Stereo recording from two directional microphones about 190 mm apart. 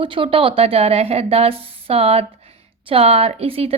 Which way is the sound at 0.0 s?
25° right (ahead or behind).